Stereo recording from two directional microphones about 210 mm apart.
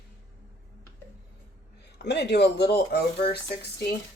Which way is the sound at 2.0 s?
55° left (ahead or behind).